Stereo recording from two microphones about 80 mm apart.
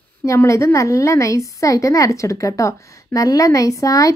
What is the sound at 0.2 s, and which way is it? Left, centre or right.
A woman's voice, left.